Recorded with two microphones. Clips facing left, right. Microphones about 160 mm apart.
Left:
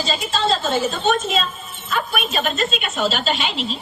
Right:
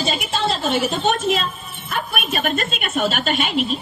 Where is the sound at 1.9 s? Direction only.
55° right (ahead or behind).